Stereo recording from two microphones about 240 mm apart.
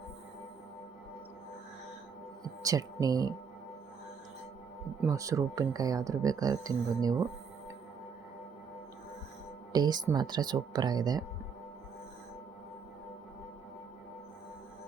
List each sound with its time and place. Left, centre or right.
2.6 s speech: centre
4.9 s speech: centre
9.7 s speech: centre